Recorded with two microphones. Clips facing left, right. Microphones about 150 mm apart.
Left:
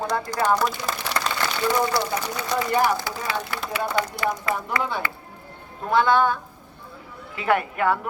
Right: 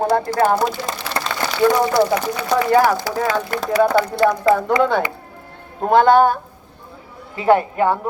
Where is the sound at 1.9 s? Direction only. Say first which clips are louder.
Right 8 dB; 65° right (ahead or behind).